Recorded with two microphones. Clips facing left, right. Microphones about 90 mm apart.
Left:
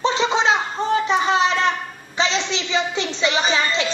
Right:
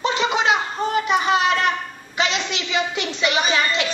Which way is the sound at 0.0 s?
30° left (ahead or behind).